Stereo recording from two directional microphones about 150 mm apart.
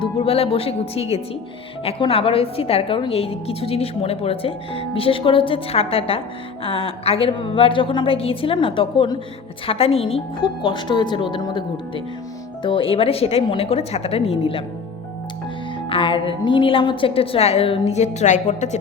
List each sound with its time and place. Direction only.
0.0 s a woman's voice: 40° left (ahead or behind)
15.9 s a woman's voice: 35° left (ahead or behind); by 18.8 s 50° left (ahead or behind)